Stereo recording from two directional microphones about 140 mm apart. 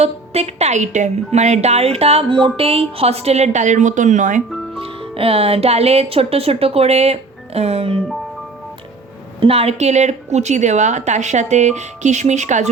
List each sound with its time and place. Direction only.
0.0 s a woman's voice: 50° right (ahead or behind)
4.4 s music: centre (ahead or behind)
4.8 s speech: 40° right (ahead or behind)
9.4 s a woman's voice: 45° right (ahead or behind)